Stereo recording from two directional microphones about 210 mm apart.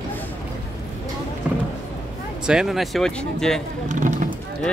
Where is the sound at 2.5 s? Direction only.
Centre (ahead or behind).